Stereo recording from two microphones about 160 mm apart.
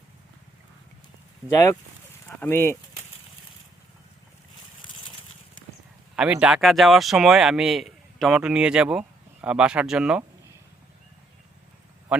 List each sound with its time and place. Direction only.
2.4 s speech: 15° left (ahead or behind)
4.8 s a sound: 30° left (ahead or behind)
6.1 s speech: 10° right (ahead or behind)